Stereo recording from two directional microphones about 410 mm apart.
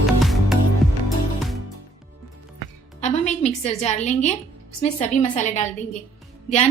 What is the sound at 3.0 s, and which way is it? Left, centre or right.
A woman's voice, centre.